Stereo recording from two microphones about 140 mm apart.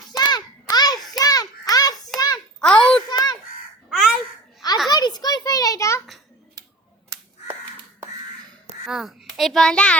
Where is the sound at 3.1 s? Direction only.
30° left (ahead or behind).